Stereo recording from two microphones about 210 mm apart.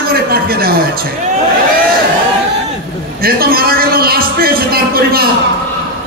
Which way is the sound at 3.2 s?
45° right (ahead or behind).